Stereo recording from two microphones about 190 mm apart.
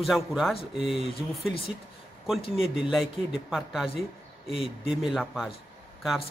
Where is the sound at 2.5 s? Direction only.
5° right (ahead or behind).